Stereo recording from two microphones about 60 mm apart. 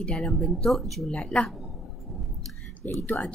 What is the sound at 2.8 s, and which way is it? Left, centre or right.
Speech, left.